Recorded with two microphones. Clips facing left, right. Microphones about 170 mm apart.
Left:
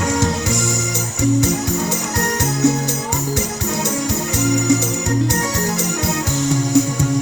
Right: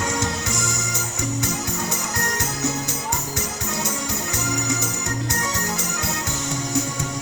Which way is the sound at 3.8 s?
35° left (ahead or behind).